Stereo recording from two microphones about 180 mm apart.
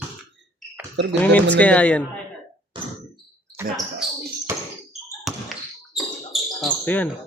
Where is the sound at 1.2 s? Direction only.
10° left (ahead or behind).